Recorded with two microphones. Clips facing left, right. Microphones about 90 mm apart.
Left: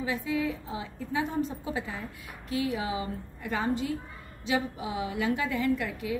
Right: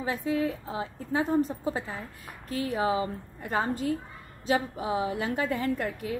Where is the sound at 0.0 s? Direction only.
40° right (ahead or behind).